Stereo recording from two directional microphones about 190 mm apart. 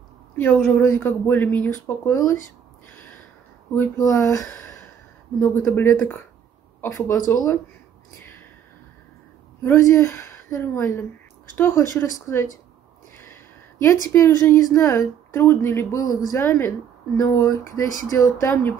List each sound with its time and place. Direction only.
0.4 s a woman's voice: 10° left (ahead or behind)
3.7 s a woman's voice: 15° left (ahead or behind)
9.6 s a woman's voice: 15° left (ahead or behind)
14.0 s a woman's voice: 15° left (ahead or behind)